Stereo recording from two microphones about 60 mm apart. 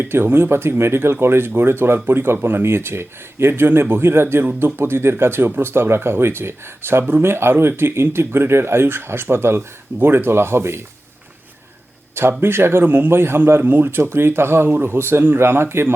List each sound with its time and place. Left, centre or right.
0.0 s speech: right
12.4 s speech: right
14.0 s speech: right